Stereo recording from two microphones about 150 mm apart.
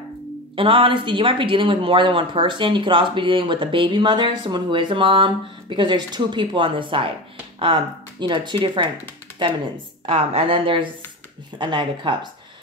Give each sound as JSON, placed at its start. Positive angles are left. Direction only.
{"t": 0.6, "sound": "speech", "side_deg": -35}
{"t": 10.0, "sound": "speech", "side_deg": -40}